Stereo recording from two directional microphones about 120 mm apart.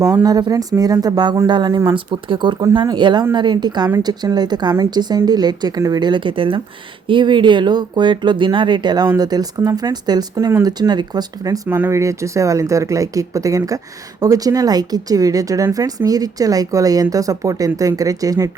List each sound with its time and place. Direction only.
0.0 s speech: 30° right (ahead or behind)